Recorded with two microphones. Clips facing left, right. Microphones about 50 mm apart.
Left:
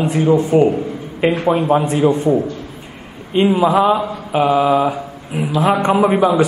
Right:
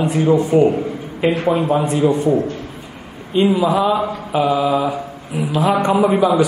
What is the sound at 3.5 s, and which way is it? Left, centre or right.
Speech, left.